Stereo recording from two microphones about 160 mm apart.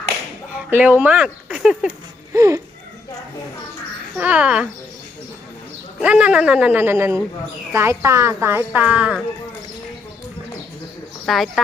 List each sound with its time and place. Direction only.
0.7 s a woman's voice: 10° right (ahead or behind)
2.3 s speech: 20° right (ahead or behind)
4.2 s a woman's voice: 10° right (ahead or behind)
6.0 s a woman's voice: 5° right (ahead or behind)
11.3 s speech: centre (ahead or behind)